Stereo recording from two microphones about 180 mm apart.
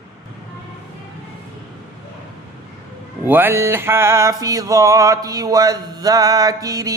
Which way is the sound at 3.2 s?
10° right (ahead or behind).